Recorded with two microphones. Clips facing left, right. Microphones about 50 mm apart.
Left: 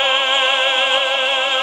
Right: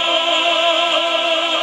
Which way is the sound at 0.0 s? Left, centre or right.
Left.